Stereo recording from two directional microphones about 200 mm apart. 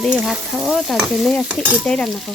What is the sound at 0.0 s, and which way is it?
Speech, centre (ahead or behind).